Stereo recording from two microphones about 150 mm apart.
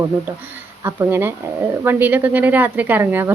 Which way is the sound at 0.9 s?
15° right (ahead or behind).